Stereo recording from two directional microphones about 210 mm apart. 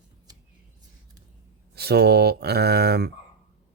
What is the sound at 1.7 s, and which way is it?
Speech, 50° right (ahead or behind).